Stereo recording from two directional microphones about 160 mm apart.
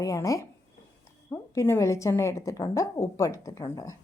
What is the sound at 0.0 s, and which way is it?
A woman's voice, 20° left (ahead or behind).